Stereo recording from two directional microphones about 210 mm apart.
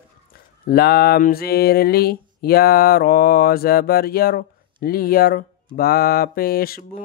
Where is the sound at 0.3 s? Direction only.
45° left (ahead or behind).